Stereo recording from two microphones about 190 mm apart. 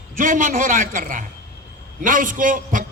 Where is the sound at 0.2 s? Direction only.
45° right (ahead or behind).